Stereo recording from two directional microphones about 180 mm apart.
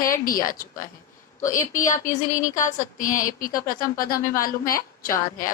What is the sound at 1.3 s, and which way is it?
Speech, 15° left (ahead or behind).